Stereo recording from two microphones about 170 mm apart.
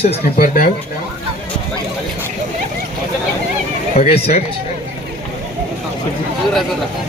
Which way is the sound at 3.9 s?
35° left (ahead or behind).